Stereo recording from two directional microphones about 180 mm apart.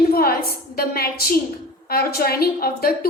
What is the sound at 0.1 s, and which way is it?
A woman's voice, 55° left (ahead or behind).